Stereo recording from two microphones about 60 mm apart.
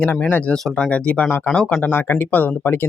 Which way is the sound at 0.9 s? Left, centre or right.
Left.